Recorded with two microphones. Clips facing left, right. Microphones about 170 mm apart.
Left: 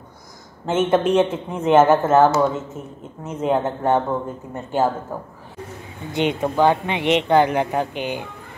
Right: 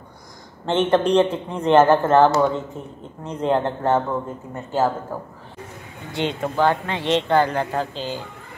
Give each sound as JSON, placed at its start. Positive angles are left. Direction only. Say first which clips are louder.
{"t": 0.7, "sound": "speech", "louder": "even", "side_deg": 5}
{"t": 5.1, "sound": "speech", "louder": "even", "side_deg": 15}